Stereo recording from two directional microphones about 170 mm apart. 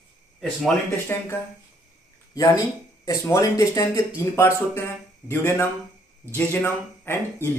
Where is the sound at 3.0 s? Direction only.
20° left (ahead or behind).